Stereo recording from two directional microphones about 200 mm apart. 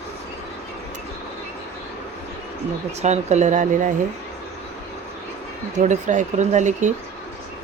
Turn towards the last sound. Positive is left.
turn(degrees=-35)  # may be behind; listen again after turning